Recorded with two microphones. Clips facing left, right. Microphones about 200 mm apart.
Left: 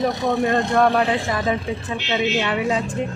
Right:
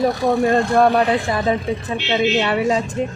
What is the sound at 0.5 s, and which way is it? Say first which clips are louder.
A woman's voice: right 1 dB; 30° right (ahead or behind).